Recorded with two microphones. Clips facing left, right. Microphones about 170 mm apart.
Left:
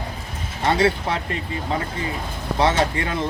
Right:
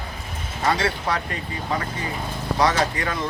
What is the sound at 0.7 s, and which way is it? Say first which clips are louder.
Speech: left 3 dB; 25° left (ahead or behind).